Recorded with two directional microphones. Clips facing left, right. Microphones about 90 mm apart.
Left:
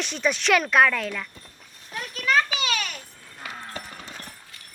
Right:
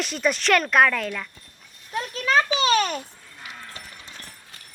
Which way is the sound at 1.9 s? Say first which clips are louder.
Right 2 dB; 30° right (ahead or behind).